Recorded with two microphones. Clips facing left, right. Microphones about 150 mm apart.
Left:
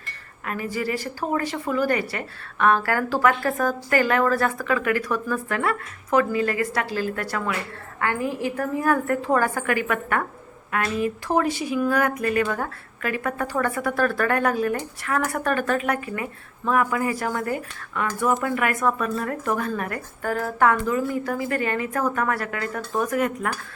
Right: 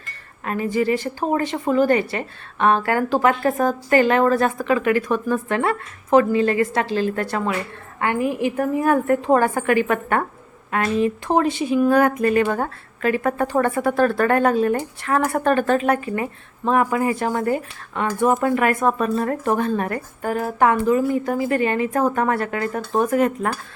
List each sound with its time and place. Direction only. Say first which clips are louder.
0.4 s a woman's voice: right 6 dB; 25° right (ahead or behind)